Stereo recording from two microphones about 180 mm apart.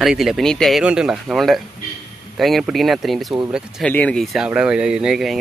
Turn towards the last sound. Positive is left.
turn(degrees=0)  # may be behind; listen again after turning